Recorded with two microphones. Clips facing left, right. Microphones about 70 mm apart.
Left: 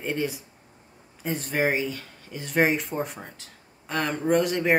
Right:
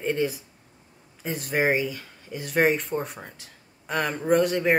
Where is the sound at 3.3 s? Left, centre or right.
Centre.